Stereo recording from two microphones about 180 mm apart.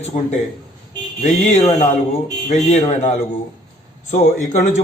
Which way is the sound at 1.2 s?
40° left (ahead or behind).